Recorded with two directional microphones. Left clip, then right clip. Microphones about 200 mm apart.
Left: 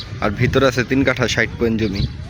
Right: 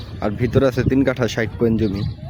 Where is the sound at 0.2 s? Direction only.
10° right (ahead or behind).